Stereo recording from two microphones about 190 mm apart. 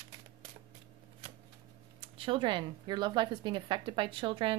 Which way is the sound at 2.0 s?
30° right (ahead or behind).